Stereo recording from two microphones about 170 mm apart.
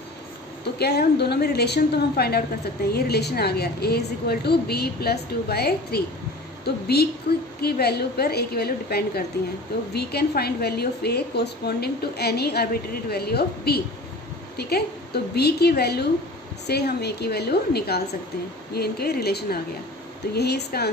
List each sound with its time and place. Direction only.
0.7 s a woman's voice: 70° left (ahead or behind)